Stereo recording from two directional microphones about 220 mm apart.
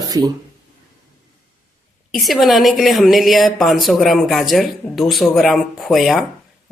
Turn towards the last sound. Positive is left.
turn(degrees=0)  # may be behind; listen again after turning